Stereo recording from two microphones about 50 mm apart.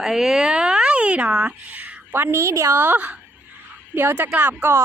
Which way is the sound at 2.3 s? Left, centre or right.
Right.